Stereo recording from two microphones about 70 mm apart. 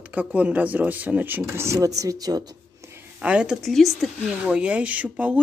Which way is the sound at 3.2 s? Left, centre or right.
Centre.